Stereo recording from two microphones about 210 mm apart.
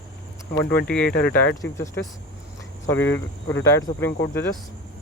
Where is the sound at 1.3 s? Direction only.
10° left (ahead or behind).